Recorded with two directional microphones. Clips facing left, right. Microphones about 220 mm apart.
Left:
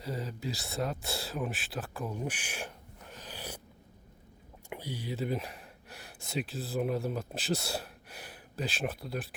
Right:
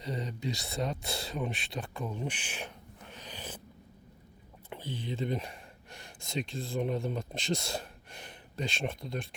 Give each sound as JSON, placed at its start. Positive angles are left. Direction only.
{"t": 0.0, "sound": "speech", "side_deg": 5}
{"t": 4.7, "sound": "speech", "side_deg": 10}